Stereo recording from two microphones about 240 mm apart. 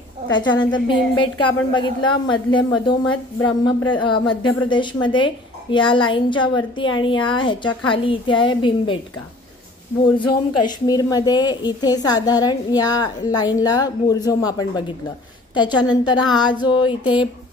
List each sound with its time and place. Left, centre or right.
0.3 s a woman's voice: centre
10.6 s a woman's voice: centre